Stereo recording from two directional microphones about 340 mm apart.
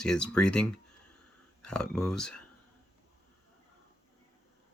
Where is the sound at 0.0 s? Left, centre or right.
Centre.